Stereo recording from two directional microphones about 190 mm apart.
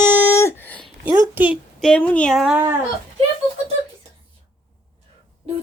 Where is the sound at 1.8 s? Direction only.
5° left (ahead or behind).